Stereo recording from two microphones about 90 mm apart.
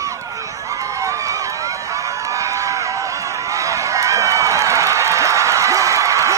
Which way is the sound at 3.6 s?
35° right (ahead or behind).